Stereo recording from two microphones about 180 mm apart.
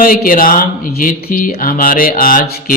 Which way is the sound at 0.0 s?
50° left (ahead or behind).